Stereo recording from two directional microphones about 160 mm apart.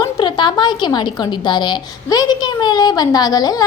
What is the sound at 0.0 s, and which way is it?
A child's voice, 30° left (ahead or behind).